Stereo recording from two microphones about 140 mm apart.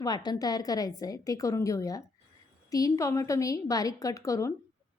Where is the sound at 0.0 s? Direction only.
30° left (ahead or behind).